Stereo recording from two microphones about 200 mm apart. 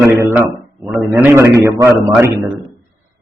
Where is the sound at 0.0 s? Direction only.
10° right (ahead or behind).